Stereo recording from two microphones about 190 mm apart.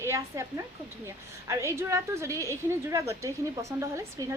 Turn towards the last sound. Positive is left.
turn(degrees=-15)  # may be behind; listen again after turning